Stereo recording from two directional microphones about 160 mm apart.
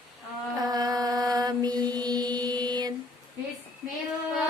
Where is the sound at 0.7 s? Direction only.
25° right (ahead or behind).